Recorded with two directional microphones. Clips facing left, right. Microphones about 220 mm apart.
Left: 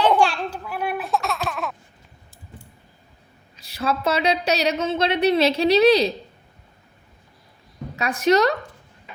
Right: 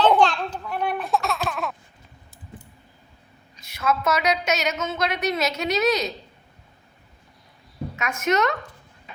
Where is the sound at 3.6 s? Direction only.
35° left (ahead or behind).